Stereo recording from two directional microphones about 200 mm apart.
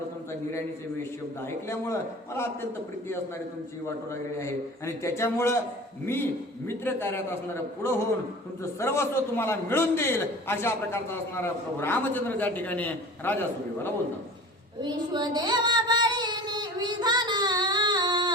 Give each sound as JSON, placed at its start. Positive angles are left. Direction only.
{"t": 1.5, "sound": "a man's voice", "side_deg": 10}
{"t": 3.8, "sound": "a man's voice", "side_deg": 15}
{"t": 6.7, "sound": "a man's voice", "side_deg": 10}
{"t": 14.8, "sound": "child singing", "side_deg": -20}